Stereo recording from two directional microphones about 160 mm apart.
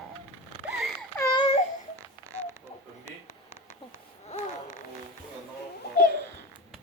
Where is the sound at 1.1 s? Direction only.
20° left (ahead or behind).